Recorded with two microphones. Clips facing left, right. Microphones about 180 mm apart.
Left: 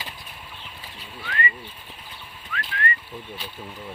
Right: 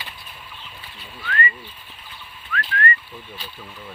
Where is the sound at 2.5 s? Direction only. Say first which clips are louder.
Right 5 dB; 20° left (ahead or behind).